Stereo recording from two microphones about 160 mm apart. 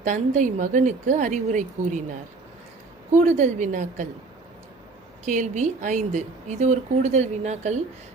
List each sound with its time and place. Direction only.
0.0 s a woman's voice: 50° right (ahead or behind)
3.1 s a woman's voice: 50° right (ahead or behind)
5.2 s a woman's voice: 50° right (ahead or behind)